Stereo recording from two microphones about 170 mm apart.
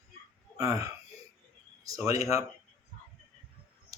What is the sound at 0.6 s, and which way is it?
Speech, 20° right (ahead or behind).